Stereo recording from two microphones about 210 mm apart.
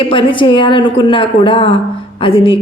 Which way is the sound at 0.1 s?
25° left (ahead or behind).